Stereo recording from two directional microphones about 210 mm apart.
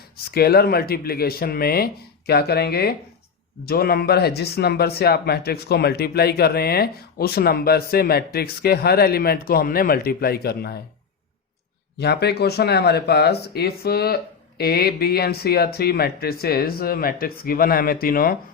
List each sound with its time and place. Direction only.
0.3 s speech: 45° left (ahead or behind)
11.9 s speech: 50° left (ahead or behind)